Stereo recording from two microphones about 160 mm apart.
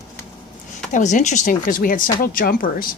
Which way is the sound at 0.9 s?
50° left (ahead or behind).